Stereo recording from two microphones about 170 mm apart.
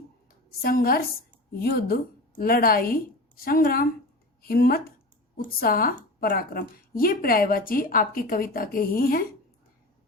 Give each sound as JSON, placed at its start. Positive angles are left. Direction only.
{"t": 0.6, "sound": "a woman's voice", "side_deg": 60}